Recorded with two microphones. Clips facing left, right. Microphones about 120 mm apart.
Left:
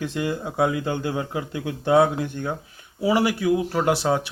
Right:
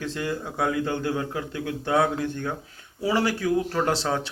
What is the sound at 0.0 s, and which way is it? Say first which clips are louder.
A man's voice: left 3 dB; 15° left (ahead or behind).